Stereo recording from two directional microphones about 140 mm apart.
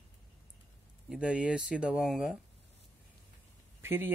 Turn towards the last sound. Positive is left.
turn(degrees=-15)  # may be behind; listen again after turning